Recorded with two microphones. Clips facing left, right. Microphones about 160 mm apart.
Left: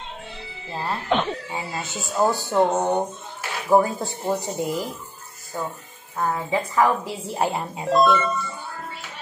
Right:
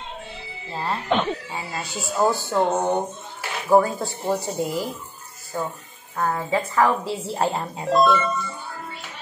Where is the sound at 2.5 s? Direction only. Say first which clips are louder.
Left 1 dB; 5° left (ahead or behind).